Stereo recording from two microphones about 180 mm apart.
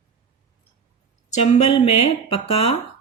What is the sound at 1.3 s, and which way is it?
Speech, 35° left (ahead or behind).